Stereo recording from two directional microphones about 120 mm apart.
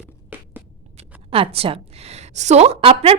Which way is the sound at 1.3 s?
50° right (ahead or behind).